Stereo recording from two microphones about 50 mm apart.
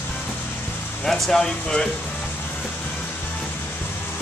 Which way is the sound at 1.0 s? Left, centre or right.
Centre.